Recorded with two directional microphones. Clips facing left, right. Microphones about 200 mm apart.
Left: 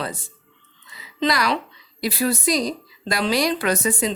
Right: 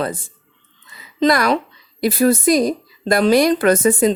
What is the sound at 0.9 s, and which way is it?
Music, 50° right (ahead or behind).